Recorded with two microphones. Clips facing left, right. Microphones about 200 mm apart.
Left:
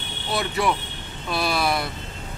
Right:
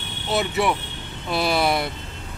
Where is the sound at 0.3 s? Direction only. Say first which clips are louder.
Right 2 dB; 25° right (ahead or behind).